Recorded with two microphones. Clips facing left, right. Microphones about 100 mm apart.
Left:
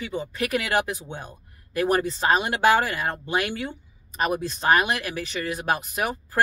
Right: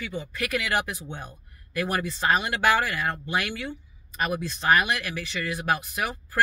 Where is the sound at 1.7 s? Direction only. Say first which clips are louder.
Left 5 dB; 30° left (ahead or behind).